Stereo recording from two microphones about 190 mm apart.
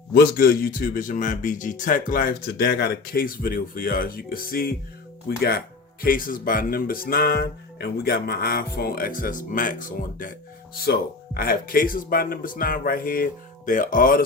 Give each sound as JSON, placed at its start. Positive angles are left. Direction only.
{"t": 0.1, "sound": "speech", "side_deg": 55}
{"t": 11.3, "sound": "speech", "side_deg": 50}